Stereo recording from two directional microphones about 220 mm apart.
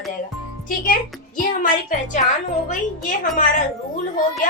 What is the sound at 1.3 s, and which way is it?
Speech, 35° left (ahead or behind).